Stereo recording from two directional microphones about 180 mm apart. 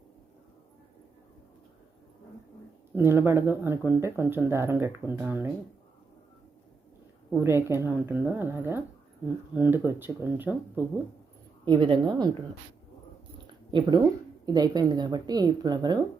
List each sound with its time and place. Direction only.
2.9 s speech: 15° right (ahead or behind)
7.3 s speech: 15° right (ahead or behind)
11.6 s speech: 25° right (ahead or behind)
13.7 s speech: 25° right (ahead or behind)